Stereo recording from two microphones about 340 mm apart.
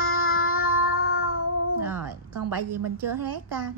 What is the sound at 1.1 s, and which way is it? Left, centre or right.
Cat, left.